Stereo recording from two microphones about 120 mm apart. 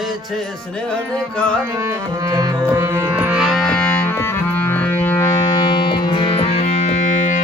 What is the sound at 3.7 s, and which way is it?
Music, 15° left (ahead or behind).